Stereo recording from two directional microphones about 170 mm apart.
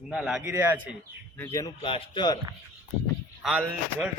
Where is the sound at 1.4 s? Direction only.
15° left (ahead or behind).